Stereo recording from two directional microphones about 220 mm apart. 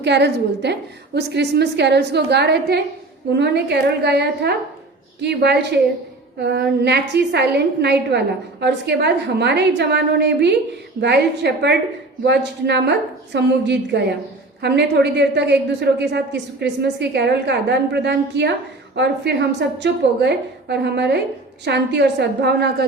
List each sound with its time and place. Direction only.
0.0 s a woman's voice: 50° right (ahead or behind)